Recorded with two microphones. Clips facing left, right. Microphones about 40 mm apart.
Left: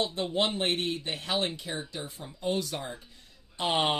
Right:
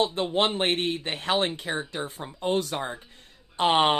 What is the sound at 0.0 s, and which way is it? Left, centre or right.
Speech, right.